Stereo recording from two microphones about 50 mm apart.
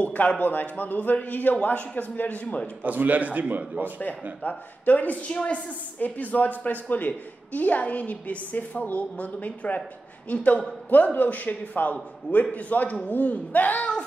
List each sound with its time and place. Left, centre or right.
0.0 s speech: left
2.8 s a man's voice: right
4.0 s speech: left